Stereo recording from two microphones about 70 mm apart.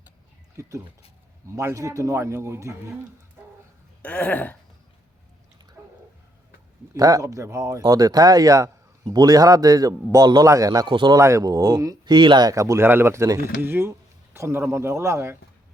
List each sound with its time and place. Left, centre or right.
0.6 s a man's voice: right
4.0 s a sound: centre
6.9 s speech: right
9.0 s speech: right
10.4 s speech: right
11.2 s speech: right
12.0 s speech: right
12.5 s a man's voice: right
12.8 s speech: right
13.6 s speech: right